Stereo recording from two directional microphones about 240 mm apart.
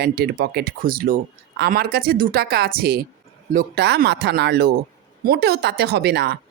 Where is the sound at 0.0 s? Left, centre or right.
Right.